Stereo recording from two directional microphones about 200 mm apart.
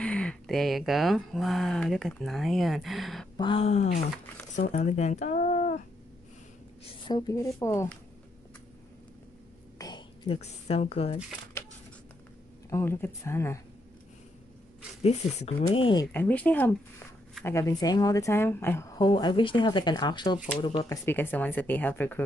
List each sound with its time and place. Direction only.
0.0 s speech: 5° left (ahead or behind)
3.3 s speech: 25° left (ahead or behind)
6.8 s a woman's voice: 20° left (ahead or behind)
9.8 s a sound: 20° left (ahead or behind)
12.6 s a woman's voice: 15° left (ahead or behind)
15.0 s a woman's voice: 30° left (ahead or behind)
16.1 s a woman's voice: 10° left (ahead or behind); by 21.0 s 25° left (ahead or behind)
21.0 s a woman's voice: 10° left (ahead or behind)